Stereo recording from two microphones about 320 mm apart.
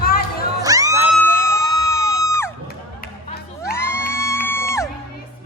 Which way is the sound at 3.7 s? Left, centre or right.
Centre.